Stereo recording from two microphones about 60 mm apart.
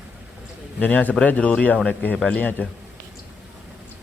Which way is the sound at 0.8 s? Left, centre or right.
Left.